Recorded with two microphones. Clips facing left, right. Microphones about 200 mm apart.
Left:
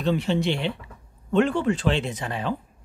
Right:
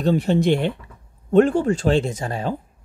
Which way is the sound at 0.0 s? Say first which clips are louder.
Right 5 dB; 45° right (ahead or behind).